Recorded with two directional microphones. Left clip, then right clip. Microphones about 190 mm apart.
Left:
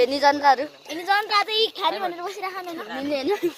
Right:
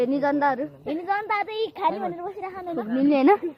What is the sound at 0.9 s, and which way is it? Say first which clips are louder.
A woman's voice: left 4 dB; centre (ahead or behind).